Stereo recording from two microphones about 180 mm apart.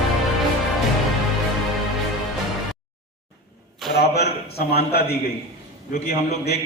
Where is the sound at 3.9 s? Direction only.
65° left (ahead or behind).